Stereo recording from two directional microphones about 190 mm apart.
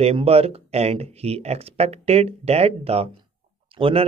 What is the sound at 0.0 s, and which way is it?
Speech, 30° right (ahead or behind).